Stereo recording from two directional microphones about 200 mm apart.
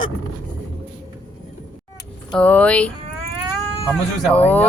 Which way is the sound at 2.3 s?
5° left (ahead or behind).